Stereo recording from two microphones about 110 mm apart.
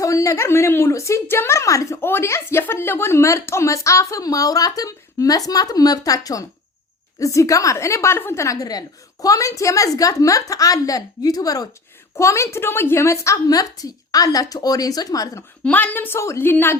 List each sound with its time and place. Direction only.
0.0 s a woman's voice: 30° left (ahead or behind)
15.6 s a woman's voice: 15° left (ahead or behind)